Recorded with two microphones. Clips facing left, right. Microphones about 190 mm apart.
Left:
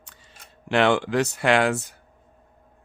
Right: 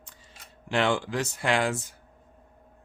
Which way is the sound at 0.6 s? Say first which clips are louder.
Left 5 dB; 70° left (ahead or behind).